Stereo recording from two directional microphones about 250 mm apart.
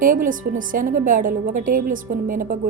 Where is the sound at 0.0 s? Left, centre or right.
Right.